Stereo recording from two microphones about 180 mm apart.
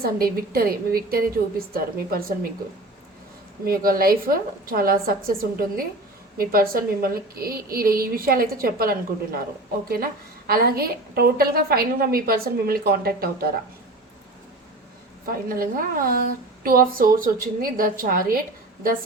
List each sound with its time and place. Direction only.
0.0 s a woman's voice: 55° right (ahead or behind)
3.7 s a woman's voice: 55° right (ahead or behind)
15.3 s a woman's voice: 55° right (ahead or behind)